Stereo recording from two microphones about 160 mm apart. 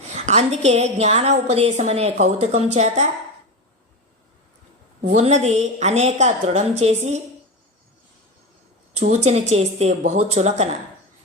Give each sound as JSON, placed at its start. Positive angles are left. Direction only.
{"t": 0.1, "sound": "a woman's voice", "side_deg": -45}
{"t": 5.0, "sound": "a woman's voice", "side_deg": -45}
{"t": 9.0, "sound": "a woman's voice", "side_deg": -45}